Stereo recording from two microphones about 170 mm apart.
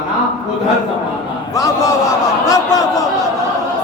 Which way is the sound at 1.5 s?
20° left (ahead or behind).